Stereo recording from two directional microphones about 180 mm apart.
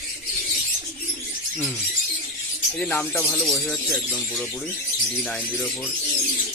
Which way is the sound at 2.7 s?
10° left (ahead or behind).